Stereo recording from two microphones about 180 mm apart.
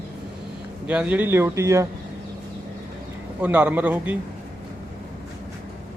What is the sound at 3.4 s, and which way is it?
Speech, 10° right (ahead or behind).